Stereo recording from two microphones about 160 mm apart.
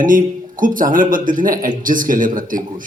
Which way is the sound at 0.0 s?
55° right (ahead or behind).